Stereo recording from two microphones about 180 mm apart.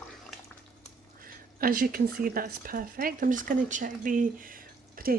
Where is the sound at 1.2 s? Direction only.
50° right (ahead or behind).